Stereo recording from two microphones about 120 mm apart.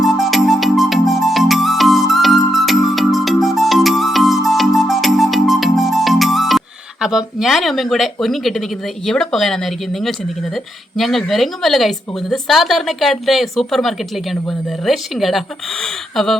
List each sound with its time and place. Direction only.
0.0 s music: centre (ahead or behind)
7.0 s speech: 5° right (ahead or behind)